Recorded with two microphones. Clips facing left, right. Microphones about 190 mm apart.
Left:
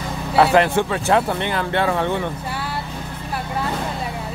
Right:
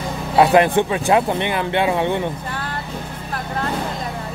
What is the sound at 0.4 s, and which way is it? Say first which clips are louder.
Speech: right 2 dB; 15° right (ahead or behind).